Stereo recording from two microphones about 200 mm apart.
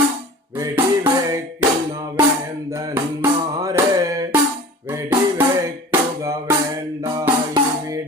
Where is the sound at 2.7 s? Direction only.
10° right (ahead or behind).